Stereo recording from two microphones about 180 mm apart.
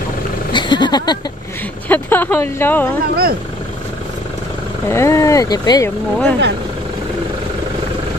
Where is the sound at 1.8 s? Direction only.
10° left (ahead or behind).